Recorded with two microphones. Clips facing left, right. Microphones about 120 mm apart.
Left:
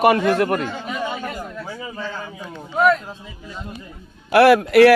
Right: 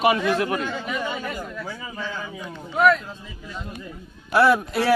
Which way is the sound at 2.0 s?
30° left (ahead or behind).